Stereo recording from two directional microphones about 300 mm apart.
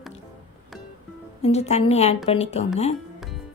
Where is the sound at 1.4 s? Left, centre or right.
Left.